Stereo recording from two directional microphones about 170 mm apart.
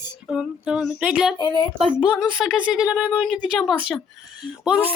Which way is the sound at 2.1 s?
5° right (ahead or behind).